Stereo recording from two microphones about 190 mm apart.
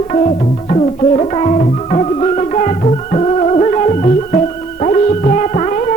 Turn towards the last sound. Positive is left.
turn(degrees=35)  # may be behind; listen again after turning